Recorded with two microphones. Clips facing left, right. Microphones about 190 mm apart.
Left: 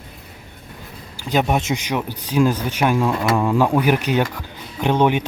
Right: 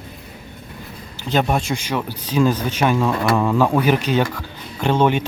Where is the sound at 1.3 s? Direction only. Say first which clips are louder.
Even; 10° left (ahead or behind).